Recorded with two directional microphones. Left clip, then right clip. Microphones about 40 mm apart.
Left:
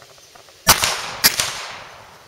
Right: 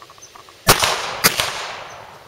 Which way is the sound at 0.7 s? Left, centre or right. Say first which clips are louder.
Right 1 dB; left.